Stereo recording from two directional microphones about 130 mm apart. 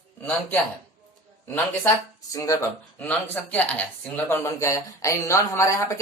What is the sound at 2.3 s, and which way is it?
Speech, 25° left (ahead or behind).